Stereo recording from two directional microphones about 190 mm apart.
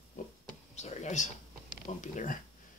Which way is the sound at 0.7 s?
35° left (ahead or behind).